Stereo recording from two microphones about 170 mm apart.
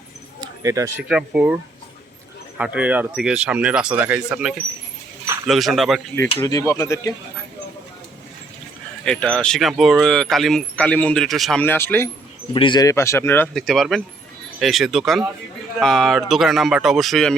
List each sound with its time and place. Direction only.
0.4 s speech: 20° right (ahead or behind)
1.0 s speech: 5° right (ahead or behind)
2.6 s speech: 10° right (ahead or behind)
6.1 s speech: 20° left (ahead or behind)
9.0 s speech: 5° left (ahead or behind)
11.6 s speech: 10° left (ahead or behind)
12.5 s speech: 25° left (ahead or behind); by 17.3 s centre (ahead or behind)